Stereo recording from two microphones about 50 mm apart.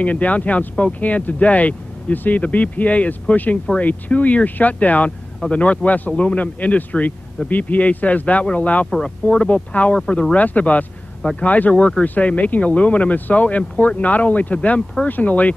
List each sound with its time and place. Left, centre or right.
0.0 s speech: left